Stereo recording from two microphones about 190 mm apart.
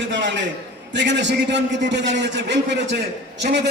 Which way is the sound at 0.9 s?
70° right (ahead or behind).